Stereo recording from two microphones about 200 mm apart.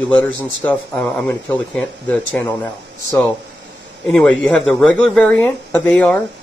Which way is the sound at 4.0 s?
5° left (ahead or behind).